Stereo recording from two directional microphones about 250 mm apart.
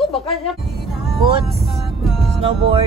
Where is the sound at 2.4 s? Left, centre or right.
Right.